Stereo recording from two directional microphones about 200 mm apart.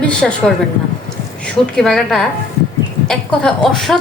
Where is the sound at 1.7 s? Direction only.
Centre (ahead or behind).